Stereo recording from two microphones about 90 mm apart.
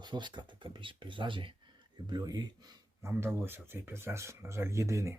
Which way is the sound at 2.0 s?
50° right (ahead or behind).